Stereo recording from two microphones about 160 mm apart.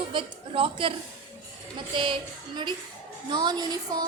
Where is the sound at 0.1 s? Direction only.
35° right (ahead or behind).